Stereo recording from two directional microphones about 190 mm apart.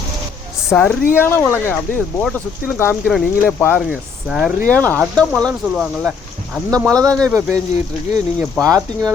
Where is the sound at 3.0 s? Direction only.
Centre (ahead or behind).